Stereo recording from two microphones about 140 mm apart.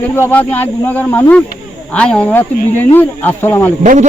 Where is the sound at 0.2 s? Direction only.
10° left (ahead or behind).